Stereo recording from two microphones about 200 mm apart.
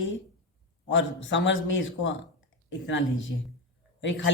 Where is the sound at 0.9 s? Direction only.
65° left (ahead or behind).